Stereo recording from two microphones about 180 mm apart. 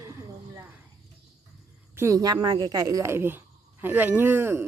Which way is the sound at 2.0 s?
20° right (ahead or behind).